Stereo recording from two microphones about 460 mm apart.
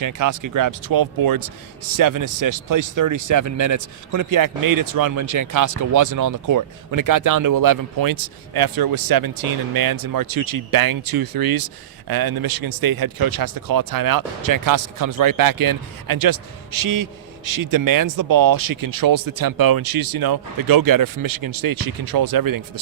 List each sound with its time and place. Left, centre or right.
0.0 s speech: right